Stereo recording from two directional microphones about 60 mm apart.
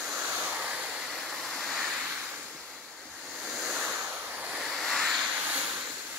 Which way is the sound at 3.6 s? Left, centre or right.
Centre.